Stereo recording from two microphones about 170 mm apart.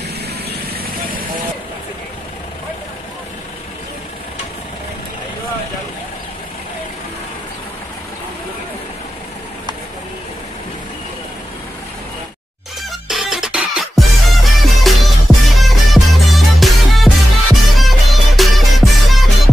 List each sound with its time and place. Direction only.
0.5 s vehicle: 65° right (ahead or behind)
13.1 s music: 5° right (ahead or behind)